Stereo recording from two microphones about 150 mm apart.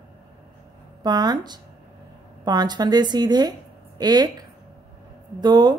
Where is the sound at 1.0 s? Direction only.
25° right (ahead or behind).